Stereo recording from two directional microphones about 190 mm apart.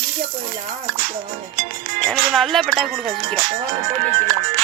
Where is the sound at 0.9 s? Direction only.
50° right (ahead or behind).